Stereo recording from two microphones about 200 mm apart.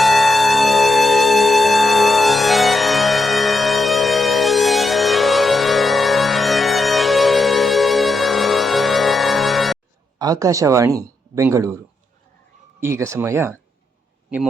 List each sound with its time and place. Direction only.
0.0 s music: centre (ahead or behind)
10.2 s speech: 20° right (ahead or behind)
12.8 s speech: 15° right (ahead or behind)